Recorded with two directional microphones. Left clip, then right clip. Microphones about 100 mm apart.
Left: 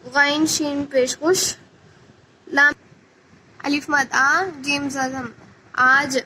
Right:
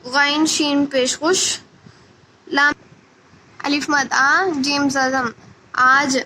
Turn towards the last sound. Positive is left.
turn(degrees=-25)  # may be behind; listen again after turning